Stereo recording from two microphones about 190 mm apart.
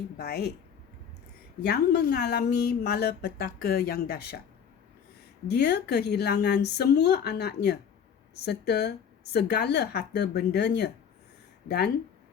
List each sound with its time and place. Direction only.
0.2 s speech: 55° left (ahead or behind)
1.6 s speech: 60° left (ahead or behind)
5.5 s speech: 60° left (ahead or behind)